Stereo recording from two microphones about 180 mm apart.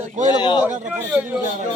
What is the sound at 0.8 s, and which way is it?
Speech, 10° right (ahead or behind).